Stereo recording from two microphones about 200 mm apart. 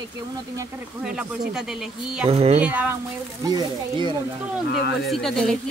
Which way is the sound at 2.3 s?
30° right (ahead or behind).